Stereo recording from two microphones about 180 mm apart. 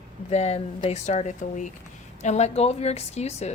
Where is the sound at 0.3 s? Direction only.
35° left (ahead or behind).